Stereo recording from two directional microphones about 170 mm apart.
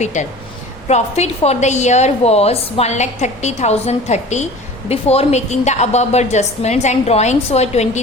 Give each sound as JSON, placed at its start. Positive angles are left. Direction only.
{"t": 0.0, "sound": "a woman's voice", "side_deg": 45}